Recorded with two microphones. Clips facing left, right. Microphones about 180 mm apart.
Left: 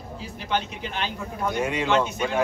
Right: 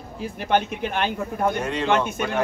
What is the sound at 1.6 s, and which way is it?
Speech, 10° left (ahead or behind).